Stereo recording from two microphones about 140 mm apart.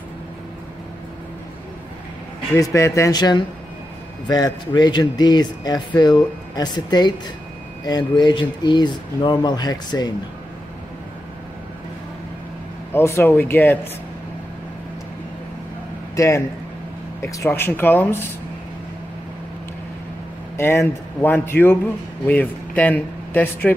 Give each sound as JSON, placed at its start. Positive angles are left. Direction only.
{"t": 2.5, "sound": "speech", "side_deg": 20}
{"t": 12.9, "sound": "speech", "side_deg": 15}
{"t": 16.2, "sound": "speech", "side_deg": 20}
{"t": 20.5, "sound": "speech", "side_deg": 15}